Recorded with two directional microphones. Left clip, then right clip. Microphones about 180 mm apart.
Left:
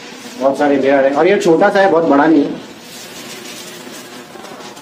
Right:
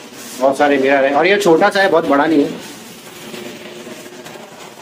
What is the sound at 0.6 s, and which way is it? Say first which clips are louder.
Speech: left 1 dB; centre (ahead or behind).